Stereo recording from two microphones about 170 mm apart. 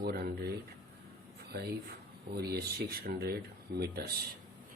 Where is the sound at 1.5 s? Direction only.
70° right (ahead or behind).